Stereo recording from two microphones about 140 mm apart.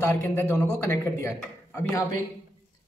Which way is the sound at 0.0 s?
15° left (ahead or behind).